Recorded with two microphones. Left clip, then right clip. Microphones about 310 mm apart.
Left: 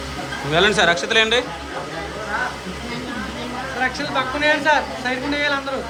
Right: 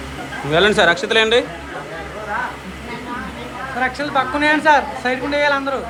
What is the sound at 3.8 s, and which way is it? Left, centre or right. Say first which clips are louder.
A man's voice: right 3 dB; centre.